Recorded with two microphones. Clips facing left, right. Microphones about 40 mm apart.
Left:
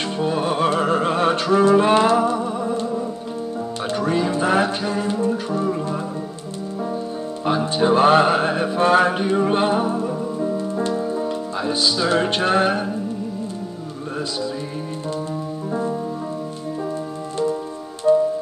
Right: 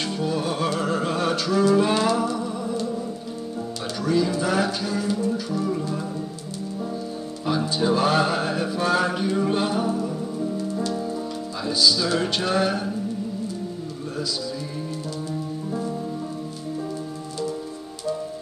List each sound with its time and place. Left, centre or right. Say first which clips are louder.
0.2 s music: left 6 dB; left
7.4 s speech: left 4 dB; left
15.7 s music: left 6 dB; left
18.1 s music: left 13 dB; left